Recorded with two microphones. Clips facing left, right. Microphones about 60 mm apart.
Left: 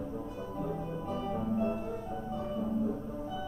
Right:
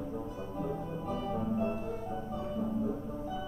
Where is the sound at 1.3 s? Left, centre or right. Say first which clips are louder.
Left 1 dB; centre.